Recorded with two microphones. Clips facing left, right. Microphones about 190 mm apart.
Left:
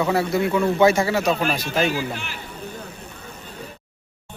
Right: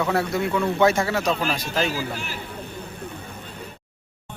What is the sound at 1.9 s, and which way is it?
Speech, 40° right (ahead or behind).